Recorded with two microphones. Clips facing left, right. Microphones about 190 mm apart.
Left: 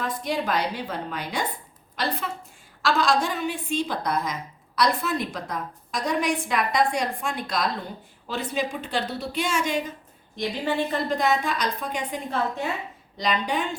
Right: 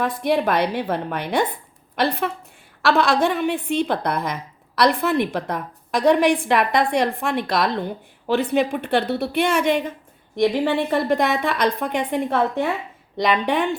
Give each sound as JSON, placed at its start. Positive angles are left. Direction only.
{"t": 0.2, "sound": "a woman's voice", "side_deg": -60}